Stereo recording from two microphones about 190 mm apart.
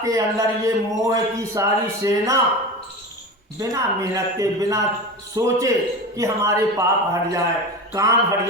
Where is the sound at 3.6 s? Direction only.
15° right (ahead or behind).